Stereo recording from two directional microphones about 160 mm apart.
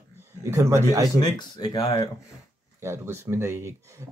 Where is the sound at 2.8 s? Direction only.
15° right (ahead or behind).